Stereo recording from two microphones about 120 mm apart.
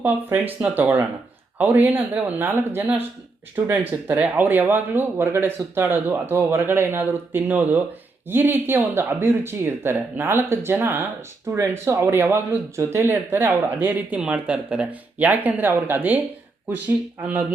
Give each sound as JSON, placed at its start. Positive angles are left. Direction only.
{"t": 0.0, "sound": "speech", "side_deg": -15}